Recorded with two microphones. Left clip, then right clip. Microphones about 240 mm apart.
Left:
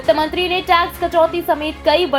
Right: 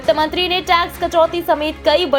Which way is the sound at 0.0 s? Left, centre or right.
Right.